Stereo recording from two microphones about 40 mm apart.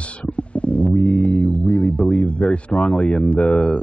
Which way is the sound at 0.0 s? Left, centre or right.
Left.